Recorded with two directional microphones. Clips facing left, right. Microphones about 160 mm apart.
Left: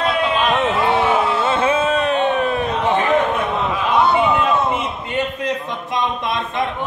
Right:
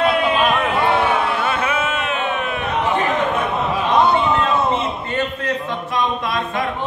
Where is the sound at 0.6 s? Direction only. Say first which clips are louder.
Left 1 dB; 25° left (ahead or behind).